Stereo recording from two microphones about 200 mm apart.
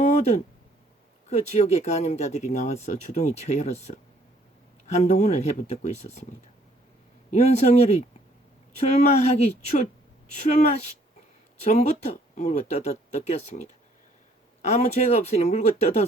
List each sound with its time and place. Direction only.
0.0 s a sound: 35° left (ahead or behind)
1.3 s speech: 35° left (ahead or behind)
7.3 s speech: 35° left (ahead or behind)